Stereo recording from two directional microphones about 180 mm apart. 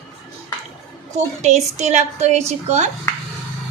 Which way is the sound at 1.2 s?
40° right (ahead or behind).